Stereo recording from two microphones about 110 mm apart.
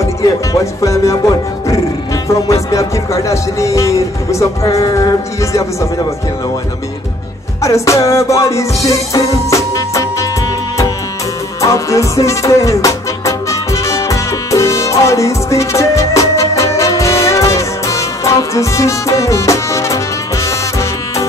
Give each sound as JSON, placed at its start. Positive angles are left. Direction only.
{"t": 0.0, "sound": "music", "side_deg": 30}
{"t": 2.2, "sound": "speech", "side_deg": 30}
{"t": 7.6, "sound": "music", "side_deg": 30}
{"t": 11.6, "sound": "music", "side_deg": 30}